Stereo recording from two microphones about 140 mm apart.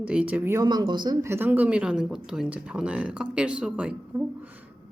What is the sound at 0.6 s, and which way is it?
Speech, 30° right (ahead or behind).